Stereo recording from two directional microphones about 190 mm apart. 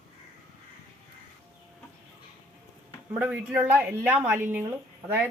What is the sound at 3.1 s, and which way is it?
A woman's voice, 5° right (ahead or behind).